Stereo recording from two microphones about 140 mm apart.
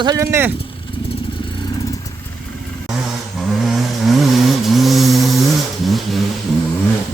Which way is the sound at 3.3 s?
Centre (ahead or behind).